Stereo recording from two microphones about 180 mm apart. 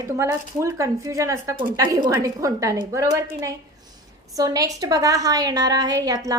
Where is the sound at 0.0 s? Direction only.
15° right (ahead or behind).